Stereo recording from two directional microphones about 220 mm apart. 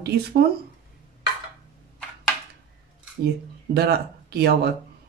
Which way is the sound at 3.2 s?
45° right (ahead or behind).